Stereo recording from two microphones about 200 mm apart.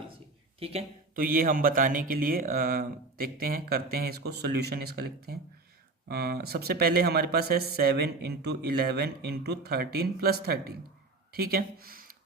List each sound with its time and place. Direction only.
0.6 s speech: 30° right (ahead or behind)
1.1 s speech: 45° right (ahead or behind)